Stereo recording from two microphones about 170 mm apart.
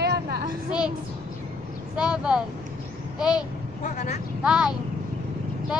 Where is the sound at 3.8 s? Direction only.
45° left (ahead or behind).